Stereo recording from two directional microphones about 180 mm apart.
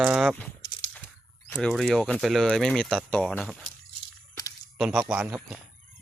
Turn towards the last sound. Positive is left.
turn(degrees=-5)  # may be behind; listen again after turning